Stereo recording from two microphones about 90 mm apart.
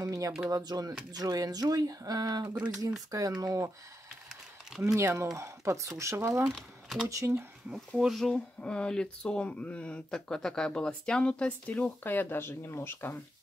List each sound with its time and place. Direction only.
0.0 s a sound: 40° right (ahead or behind)
0.5 s speech: 45° right (ahead or behind)
4.9 s speech: 35° right (ahead or behind)
6.5 s typing: 5° right (ahead or behind)
7.1 s speech: 35° right (ahead or behind)
8.0 s speech: centre (ahead or behind)
8.5 s speech: 10° left (ahead or behind)